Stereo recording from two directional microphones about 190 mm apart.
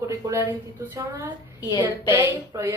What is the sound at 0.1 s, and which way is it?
Speech, 15° right (ahead or behind).